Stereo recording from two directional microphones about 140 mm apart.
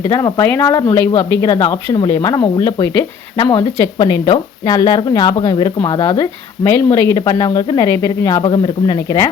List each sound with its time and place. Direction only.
0.1 s speech: 20° left (ahead or behind)